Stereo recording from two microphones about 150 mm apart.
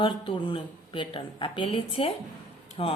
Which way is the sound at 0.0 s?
35° left (ahead or behind).